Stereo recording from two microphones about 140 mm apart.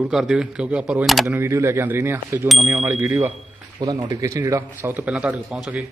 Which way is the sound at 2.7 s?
10° right (ahead or behind).